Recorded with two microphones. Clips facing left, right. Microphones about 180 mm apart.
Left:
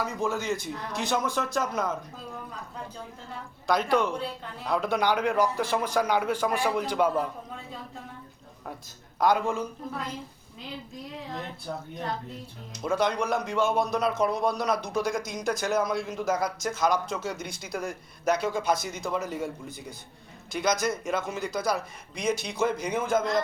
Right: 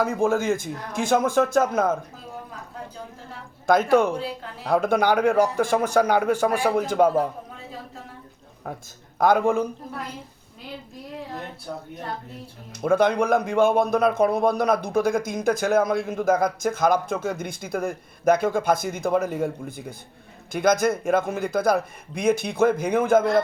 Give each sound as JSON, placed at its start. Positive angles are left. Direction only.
{"t": 0.0, "sound": "a man's voice", "side_deg": -50}
{"t": 3.7, "sound": "a man's voice", "side_deg": -45}
{"t": 9.1, "sound": "a man's voice", "side_deg": -50}
{"t": 12.8, "sound": "a man's voice", "side_deg": -55}